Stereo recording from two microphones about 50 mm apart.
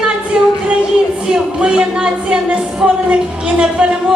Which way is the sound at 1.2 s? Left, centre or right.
Centre.